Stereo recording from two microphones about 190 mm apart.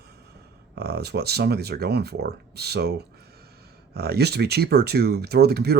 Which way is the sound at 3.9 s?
55° right (ahead or behind).